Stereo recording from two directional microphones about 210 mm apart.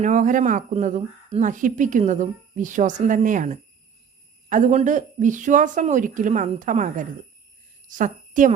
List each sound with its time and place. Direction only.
0.0 s speech: 35° right (ahead or behind)